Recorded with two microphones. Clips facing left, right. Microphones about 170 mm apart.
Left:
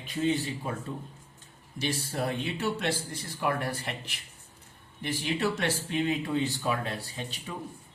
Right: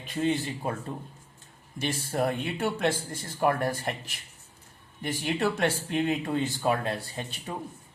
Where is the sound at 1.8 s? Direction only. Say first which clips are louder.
Right 3 dB; 50° right (ahead or behind).